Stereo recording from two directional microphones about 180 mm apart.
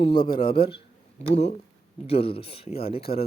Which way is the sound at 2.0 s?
35° left (ahead or behind).